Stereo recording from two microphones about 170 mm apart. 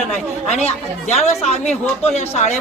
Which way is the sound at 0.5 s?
40° left (ahead or behind).